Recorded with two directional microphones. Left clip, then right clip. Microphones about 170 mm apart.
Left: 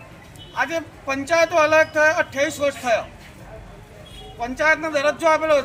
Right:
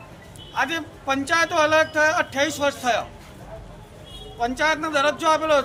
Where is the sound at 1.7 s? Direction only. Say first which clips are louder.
Left 2 dB; 10° right (ahead or behind).